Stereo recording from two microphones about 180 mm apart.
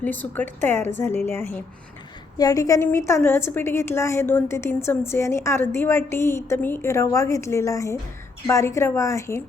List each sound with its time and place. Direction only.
0.0 s a woman's voice: 10° left (ahead or behind)